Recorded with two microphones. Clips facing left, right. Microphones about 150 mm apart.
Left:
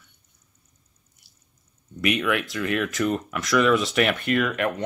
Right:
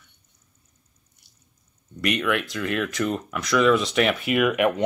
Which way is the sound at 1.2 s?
Centre (ahead or behind).